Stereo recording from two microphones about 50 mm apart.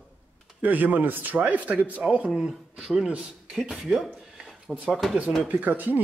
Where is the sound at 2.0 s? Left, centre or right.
Right.